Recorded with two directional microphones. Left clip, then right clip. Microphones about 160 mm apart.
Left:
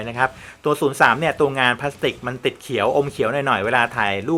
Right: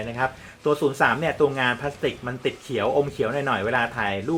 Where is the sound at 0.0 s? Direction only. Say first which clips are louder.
Left 5 dB; 35° left (ahead or behind).